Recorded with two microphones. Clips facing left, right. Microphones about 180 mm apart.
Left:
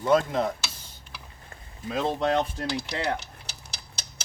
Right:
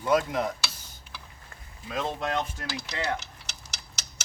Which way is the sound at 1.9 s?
30° left (ahead or behind).